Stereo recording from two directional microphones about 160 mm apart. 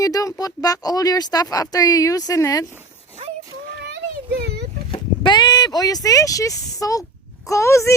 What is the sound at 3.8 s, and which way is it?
Children playing, 90° right.